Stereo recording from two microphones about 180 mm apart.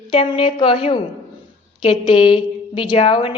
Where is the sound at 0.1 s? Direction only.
30° left (ahead or behind).